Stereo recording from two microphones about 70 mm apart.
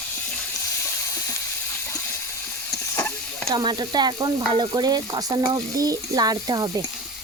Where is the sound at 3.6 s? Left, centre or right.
Right.